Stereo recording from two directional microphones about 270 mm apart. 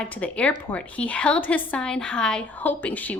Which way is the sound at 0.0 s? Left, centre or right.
Centre.